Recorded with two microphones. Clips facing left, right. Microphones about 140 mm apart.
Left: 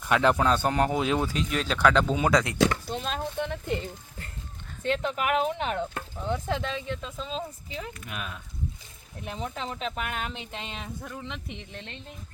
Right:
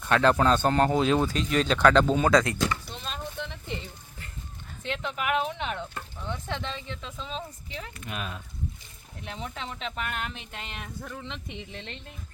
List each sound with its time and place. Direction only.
0.1 s speech: 15° left (ahead or behind)
2.9 s speech: 50° left (ahead or behind)
4.8 s speech: 45° left (ahead or behind)
7.8 s speech: centre (ahead or behind)
9.6 s speech: 40° left (ahead or behind)
9.9 s speech: 10° left (ahead or behind)
10.3 s speech: 20° left (ahead or behind)
11.2 s speech: centre (ahead or behind)